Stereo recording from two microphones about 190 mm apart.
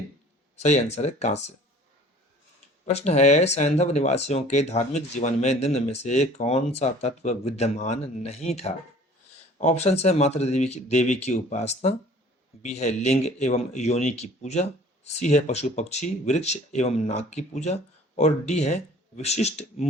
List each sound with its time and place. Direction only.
0.6 s speech: 35° left (ahead or behind)
2.8 s speech: 35° left (ahead or behind)